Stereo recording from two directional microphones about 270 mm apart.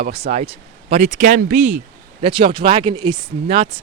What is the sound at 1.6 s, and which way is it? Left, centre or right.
Speech, right.